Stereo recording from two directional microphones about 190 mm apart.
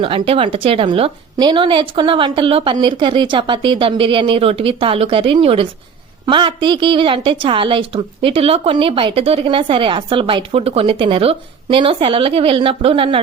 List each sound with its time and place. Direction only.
0.0 s a woman's voice: 25° right (ahead or behind)